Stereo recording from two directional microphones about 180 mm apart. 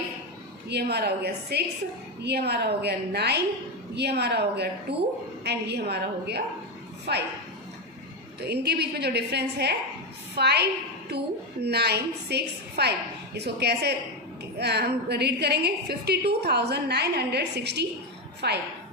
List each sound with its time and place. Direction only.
0.7 s a woman's voice: 65° right (ahead or behind)
8.4 s a woman's voice: 65° right (ahead or behind)